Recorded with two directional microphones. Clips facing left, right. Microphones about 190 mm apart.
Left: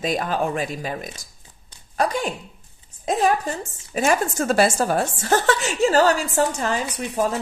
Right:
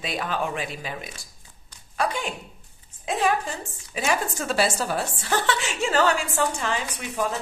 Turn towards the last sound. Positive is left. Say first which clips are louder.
# left 5 dB
turn(degrees=40)  # may be behind; listen again after turning